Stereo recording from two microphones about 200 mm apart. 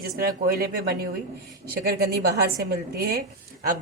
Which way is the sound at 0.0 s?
45° right (ahead or behind).